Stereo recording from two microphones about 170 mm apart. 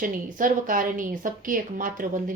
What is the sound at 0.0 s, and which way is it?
A woman's voice, 55° right (ahead or behind).